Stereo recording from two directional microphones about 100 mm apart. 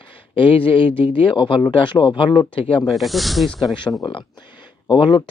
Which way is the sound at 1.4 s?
60° left (ahead or behind).